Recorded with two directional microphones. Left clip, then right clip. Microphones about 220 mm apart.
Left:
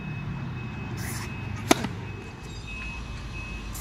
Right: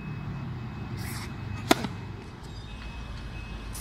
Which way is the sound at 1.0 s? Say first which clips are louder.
Left 3 dB; 5° left (ahead or behind).